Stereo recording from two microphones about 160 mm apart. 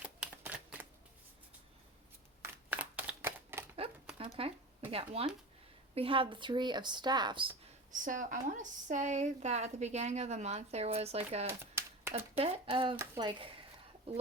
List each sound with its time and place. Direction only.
0.0 s shuffling cards: 10° right (ahead or behind)
2.9 s shuffling cards: 10° right (ahead or behind)
4.4 s a sound: 35° right (ahead or behind)
4.9 s speech: 35° right (ahead or behind)
7.9 s a woman's voice: 55° right (ahead or behind)
11.4 s a sound: 15° right (ahead or behind)
12.4 s speech: 35° right (ahead or behind)